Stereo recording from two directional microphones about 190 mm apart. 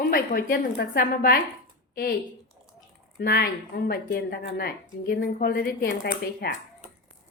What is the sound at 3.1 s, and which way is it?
A woman's voice, 55° left (ahead or behind).